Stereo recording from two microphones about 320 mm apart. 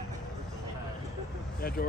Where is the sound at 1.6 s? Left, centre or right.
Left.